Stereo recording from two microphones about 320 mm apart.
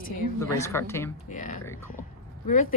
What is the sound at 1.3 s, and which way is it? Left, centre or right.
A woman's voice, left.